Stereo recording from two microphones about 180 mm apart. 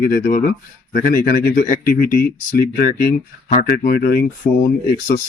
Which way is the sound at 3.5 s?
55° left (ahead or behind).